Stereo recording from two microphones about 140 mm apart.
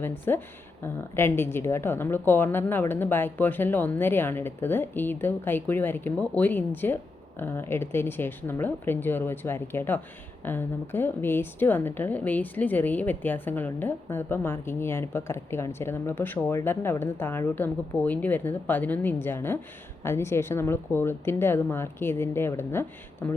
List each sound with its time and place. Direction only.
0.0 s a woman's voice: 15° left (ahead or behind)